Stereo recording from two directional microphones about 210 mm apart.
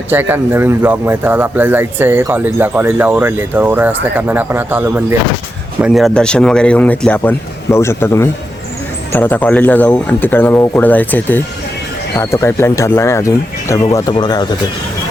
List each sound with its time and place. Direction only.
0.1 s speech: 10° right (ahead or behind); by 14.4 s 20° left (ahead or behind)